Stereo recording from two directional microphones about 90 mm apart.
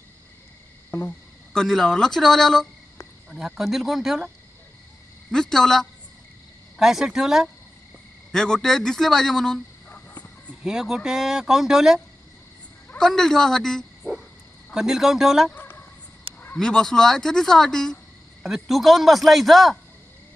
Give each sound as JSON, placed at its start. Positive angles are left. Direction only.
{"t": 1.5, "sound": "speech", "side_deg": 5}
{"t": 3.3, "sound": "speech", "side_deg": -10}
{"t": 5.3, "sound": "speech", "side_deg": 5}
{"t": 8.3, "sound": "speech", "side_deg": 5}
{"t": 9.8, "sound": "cricket", "side_deg": 25}
{"t": 10.6, "sound": "speech", "side_deg": -5}
{"t": 15.5, "sound": "a sound", "side_deg": 25}
{"t": 16.5, "sound": "speech", "side_deg": 5}